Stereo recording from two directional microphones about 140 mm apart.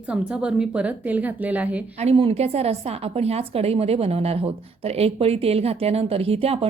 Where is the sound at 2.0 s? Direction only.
45° right (ahead or behind).